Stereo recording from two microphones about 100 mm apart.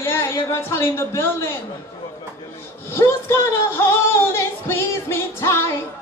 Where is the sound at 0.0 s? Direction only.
25° left (ahead or behind).